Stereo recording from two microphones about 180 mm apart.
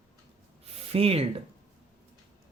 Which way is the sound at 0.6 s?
35° right (ahead or behind).